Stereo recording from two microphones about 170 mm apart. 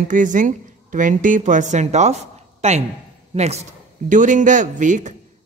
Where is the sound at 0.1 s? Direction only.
50° right (ahead or behind).